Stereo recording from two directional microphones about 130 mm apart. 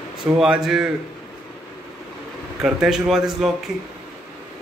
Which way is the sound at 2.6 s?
5° right (ahead or behind).